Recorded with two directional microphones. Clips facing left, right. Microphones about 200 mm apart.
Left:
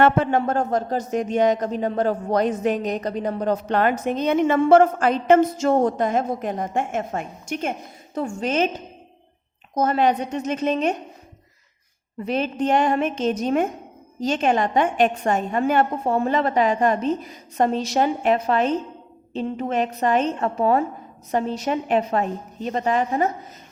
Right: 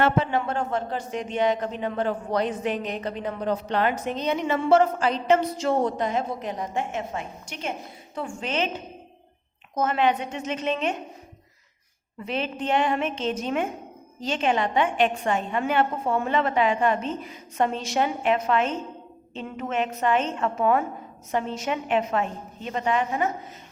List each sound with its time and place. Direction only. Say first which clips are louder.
0.0 s a woman's voice: left 5 dB; 50° left (ahead or behind)
12.2 s a woman's voice: left 6 dB; 40° left (ahead or behind)